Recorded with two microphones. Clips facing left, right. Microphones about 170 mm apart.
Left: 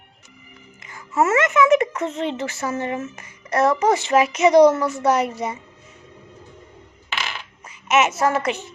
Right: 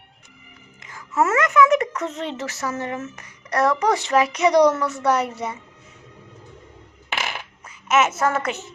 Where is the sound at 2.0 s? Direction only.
30° left (ahead or behind).